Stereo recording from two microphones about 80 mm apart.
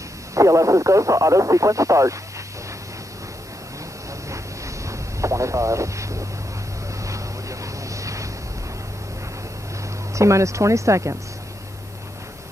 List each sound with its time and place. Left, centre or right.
0.3 s speech: right
4.8 s vehicle: right
7.0 s boat: right
10.1 s speech: right